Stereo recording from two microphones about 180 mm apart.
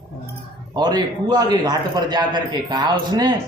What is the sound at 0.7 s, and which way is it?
A man's voice, 25° right (ahead or behind).